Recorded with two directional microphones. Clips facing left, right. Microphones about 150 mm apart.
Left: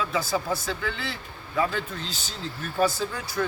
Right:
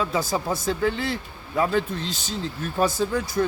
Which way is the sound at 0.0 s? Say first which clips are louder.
Right 2 dB; 40° right (ahead or behind).